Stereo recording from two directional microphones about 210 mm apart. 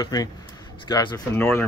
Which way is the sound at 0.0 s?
15° left (ahead or behind).